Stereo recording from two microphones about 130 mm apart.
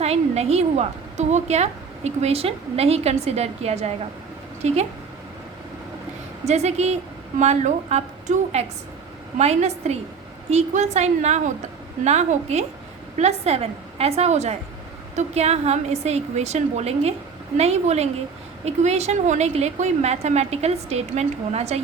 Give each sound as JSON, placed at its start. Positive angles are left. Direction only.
{"t": 0.0, "sound": "a woman's voice", "side_deg": -50}
{"t": 6.4, "sound": "a woman's voice", "side_deg": -60}